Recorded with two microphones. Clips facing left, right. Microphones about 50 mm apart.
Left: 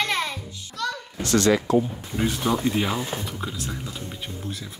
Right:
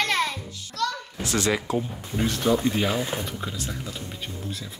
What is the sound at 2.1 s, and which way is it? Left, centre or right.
Speech, centre.